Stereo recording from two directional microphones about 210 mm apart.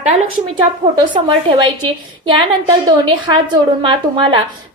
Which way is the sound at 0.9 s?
20° right (ahead or behind).